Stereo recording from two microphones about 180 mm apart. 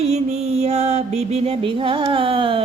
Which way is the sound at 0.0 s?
35° right (ahead or behind).